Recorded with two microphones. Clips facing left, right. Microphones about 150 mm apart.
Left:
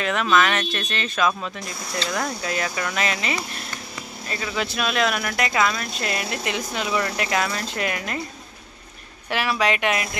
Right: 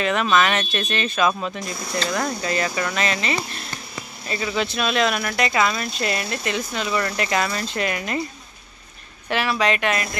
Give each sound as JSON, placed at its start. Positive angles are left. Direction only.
{"t": 0.0, "sound": "speech", "side_deg": 0}
{"t": 4.3, "sound": "speech", "side_deg": -5}
{"t": 9.3, "sound": "speech", "side_deg": 10}